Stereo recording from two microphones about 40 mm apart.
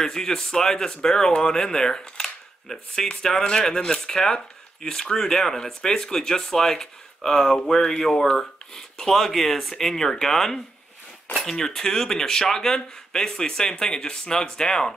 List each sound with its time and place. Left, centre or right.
0.0 s speech: centre